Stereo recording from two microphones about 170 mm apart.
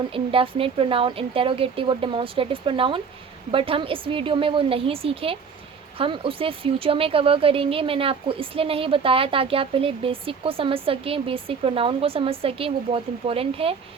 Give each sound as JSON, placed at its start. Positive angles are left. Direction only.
{"t": 0.1, "sound": "speech", "side_deg": -30}